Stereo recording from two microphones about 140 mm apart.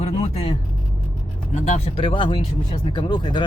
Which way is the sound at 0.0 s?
45° left (ahead or behind).